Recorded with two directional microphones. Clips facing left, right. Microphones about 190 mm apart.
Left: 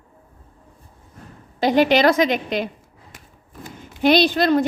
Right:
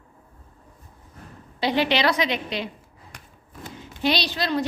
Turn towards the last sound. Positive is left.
turn(degrees=50)  # may be behind; listen again after turning